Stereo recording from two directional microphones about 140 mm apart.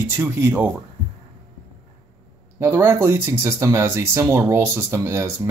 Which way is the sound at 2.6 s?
15° right (ahead or behind).